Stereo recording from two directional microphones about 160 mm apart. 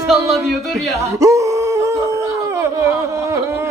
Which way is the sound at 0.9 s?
20° right (ahead or behind).